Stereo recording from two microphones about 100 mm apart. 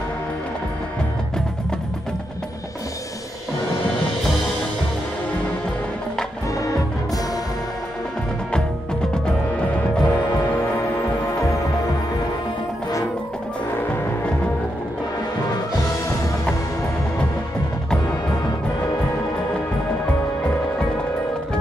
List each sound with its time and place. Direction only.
9.1 s music: 10° left (ahead or behind)
13.7 s music: 15° left (ahead or behind)